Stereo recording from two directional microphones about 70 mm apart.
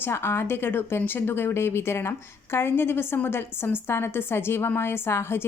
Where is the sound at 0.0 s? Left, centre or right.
Left.